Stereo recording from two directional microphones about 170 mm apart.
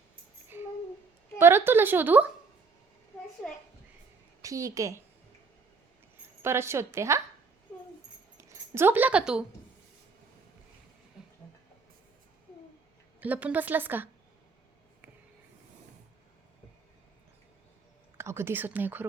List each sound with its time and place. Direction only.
0.5 s a sound: 15° right (ahead or behind)
1.4 s a woman's voice: 15° right (ahead or behind)
4.4 s a woman's voice: 20° right (ahead or behind)
6.4 s a woman's voice: 15° right (ahead or behind)
8.4 s speech: 15° right (ahead or behind)
13.1 s a woman's voice: 10° right (ahead or behind)
18.2 s a woman's voice: 15° right (ahead or behind)